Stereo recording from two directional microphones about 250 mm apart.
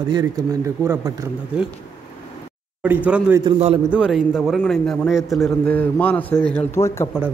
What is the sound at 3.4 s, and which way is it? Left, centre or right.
Speech, right.